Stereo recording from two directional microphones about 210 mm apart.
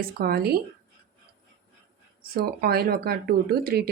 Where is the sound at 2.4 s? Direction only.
50° right (ahead or behind).